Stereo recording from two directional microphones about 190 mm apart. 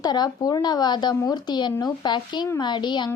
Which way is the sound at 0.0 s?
20° left (ahead or behind).